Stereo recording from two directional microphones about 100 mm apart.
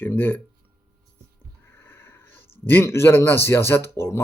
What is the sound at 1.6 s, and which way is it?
Speech, 25° left (ahead or behind).